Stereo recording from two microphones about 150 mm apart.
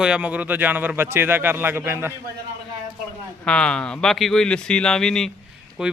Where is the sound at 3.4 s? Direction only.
5° left (ahead or behind).